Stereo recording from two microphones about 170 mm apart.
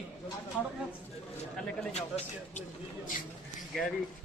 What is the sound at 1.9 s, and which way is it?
Speech, 40° left (ahead or behind).